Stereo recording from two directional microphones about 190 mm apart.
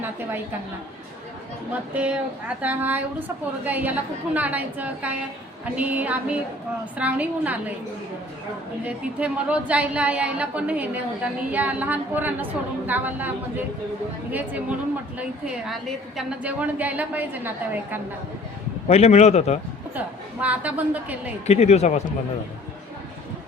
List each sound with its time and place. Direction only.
0.0 s a woman's voice: 10° right (ahead or behind)
1.7 s a woman's voice: 5° right (ahead or behind)
8.8 s a woman's voice: 5° right (ahead or behind)
15.2 s a woman's voice: 5° right (ahead or behind)
18.9 s a man's voice: 35° left (ahead or behind)
20.4 s a woman's voice: 10° right (ahead or behind)
21.4 s a man's voice: 35° left (ahead or behind)